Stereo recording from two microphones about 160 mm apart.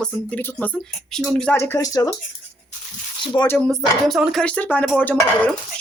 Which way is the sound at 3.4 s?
15° left (ahead or behind).